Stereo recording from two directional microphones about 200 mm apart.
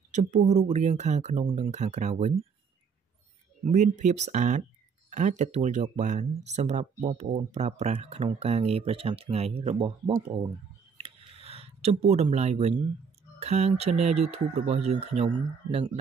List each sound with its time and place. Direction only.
0.1 s speech: 35° right (ahead or behind)
3.6 s speech: 35° right (ahead or behind)
11.4 s speech: 30° right (ahead or behind)